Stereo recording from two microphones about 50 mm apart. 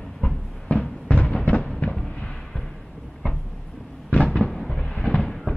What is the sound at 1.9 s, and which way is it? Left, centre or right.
Fireworks, centre.